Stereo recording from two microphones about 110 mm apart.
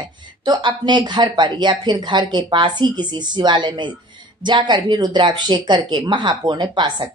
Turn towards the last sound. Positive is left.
turn(degrees=-40)  # may be behind; listen again after turning